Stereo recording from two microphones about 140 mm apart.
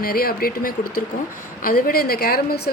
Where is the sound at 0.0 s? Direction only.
90° left.